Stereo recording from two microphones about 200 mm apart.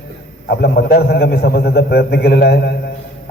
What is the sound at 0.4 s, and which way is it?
A man's voice, 55° left (ahead or behind).